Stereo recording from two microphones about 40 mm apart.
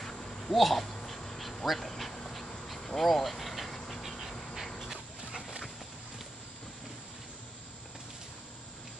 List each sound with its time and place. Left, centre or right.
0.1 s a sound: centre
0.5 s speech: centre
1.0 s dog: centre
2.8 s vehicle: centre